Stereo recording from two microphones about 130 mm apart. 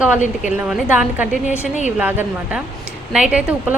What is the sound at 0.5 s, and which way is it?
Speech, 5° right (ahead or behind).